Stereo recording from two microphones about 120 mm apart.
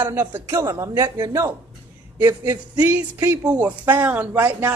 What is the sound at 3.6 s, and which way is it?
Speech, 15° right (ahead or behind).